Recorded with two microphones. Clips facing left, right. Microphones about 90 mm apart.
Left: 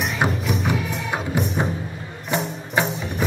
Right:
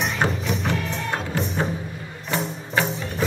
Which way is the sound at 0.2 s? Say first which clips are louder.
Left 3 dB; 10° left (ahead or behind).